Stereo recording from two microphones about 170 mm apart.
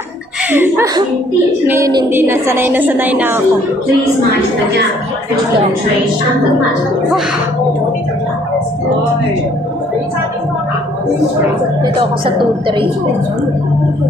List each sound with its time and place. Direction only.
0.5 s a woman's voice: 10° right (ahead or behind)
11.8 s a woman's voice: 30° right (ahead or behind)